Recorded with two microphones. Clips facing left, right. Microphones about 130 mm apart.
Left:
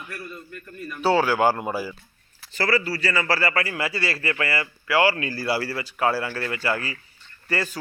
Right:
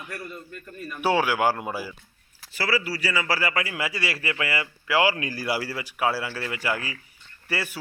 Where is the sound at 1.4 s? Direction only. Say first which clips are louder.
Left 3 dB; centre (ahead or behind).